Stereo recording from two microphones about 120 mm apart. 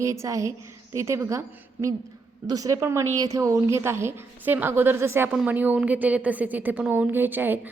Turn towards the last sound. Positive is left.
turn(degrees=-15)  # may be behind; listen again after turning